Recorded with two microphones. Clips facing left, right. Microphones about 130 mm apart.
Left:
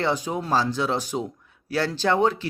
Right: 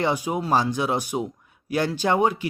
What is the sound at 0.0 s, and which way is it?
Speech, 10° right (ahead or behind).